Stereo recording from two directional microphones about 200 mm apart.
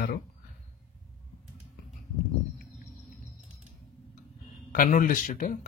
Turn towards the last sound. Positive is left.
turn(degrees=40)  # may be behind; listen again after turning